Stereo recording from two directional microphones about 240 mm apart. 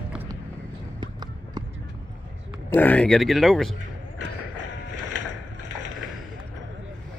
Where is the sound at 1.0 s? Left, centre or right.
Centre.